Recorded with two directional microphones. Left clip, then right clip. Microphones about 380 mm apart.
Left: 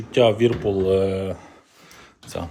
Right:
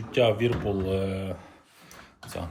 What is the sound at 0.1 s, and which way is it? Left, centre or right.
Speech, centre.